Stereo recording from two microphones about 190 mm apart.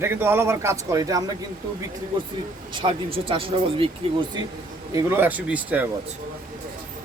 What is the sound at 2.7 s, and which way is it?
Speech, 25° right (ahead or behind).